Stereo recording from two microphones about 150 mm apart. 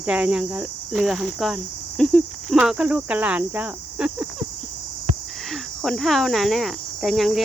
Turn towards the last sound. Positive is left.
turn(degrees=0)  # may be behind; listen again after turning